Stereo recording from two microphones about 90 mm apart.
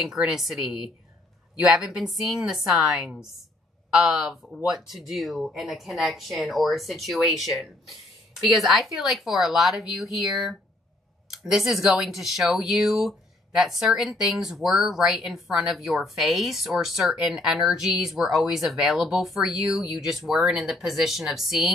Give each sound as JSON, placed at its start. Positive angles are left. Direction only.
{"t": 0.2, "sound": "speech", "side_deg": -5}